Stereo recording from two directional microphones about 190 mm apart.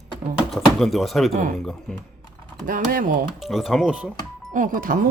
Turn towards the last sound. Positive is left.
turn(degrees=-45)  # may be behind; listen again after turning